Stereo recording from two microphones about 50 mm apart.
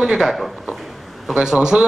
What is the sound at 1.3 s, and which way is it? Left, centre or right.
Speech, centre.